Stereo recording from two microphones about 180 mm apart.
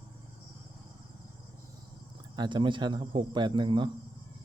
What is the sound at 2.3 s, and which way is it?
Speech, 25° right (ahead or behind).